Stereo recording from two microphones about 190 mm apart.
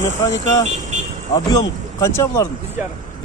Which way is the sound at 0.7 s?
40° right (ahead or behind).